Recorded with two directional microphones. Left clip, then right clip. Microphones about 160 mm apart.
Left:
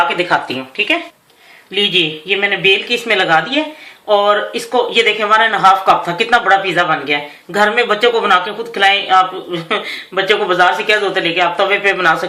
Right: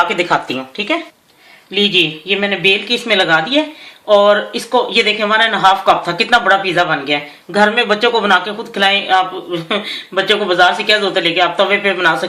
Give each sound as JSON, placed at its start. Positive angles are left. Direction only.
{"t": 1.7, "sound": "speech", "side_deg": -45}